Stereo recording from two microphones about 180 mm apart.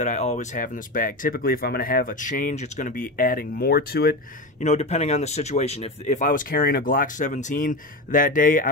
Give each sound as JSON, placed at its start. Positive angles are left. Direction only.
{"t": 0.0, "sound": "speech", "side_deg": 40}
{"t": 4.6, "sound": "speech", "side_deg": 40}